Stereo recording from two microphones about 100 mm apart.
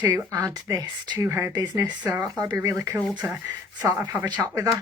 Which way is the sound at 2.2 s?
40° right (ahead or behind).